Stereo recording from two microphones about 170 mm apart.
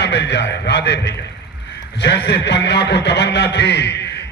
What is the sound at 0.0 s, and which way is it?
A man's voice, 90° left.